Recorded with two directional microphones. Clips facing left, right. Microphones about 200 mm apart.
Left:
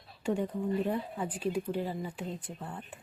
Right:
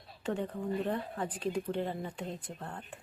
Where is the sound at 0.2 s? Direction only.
10° left (ahead or behind).